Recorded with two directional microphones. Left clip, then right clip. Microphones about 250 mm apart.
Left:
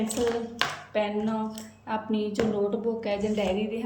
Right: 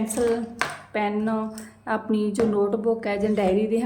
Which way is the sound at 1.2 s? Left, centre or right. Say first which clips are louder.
Right 3 dB; centre.